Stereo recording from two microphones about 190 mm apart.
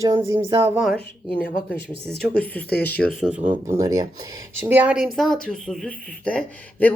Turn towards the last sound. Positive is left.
turn(degrees=10)  # may be behind; listen again after turning